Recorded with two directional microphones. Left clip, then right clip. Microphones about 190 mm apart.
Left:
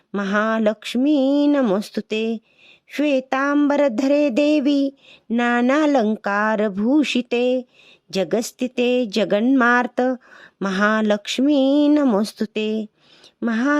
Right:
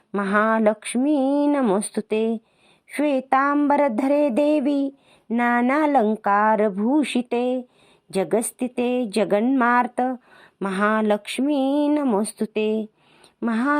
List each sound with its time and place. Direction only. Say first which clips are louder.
0.1 s speech: right 1 dB; 25° left (ahead or behind)